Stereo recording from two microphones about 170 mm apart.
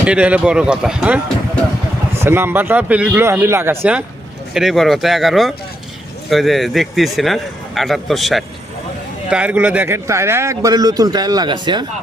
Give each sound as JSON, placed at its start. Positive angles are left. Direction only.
{"t": 0.0, "sound": "speech", "side_deg": -5}